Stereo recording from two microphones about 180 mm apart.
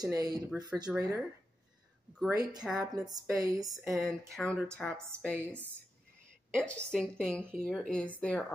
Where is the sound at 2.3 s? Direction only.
20° right (ahead or behind).